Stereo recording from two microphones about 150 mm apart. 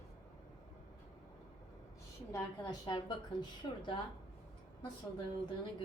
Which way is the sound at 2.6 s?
30° left (ahead or behind).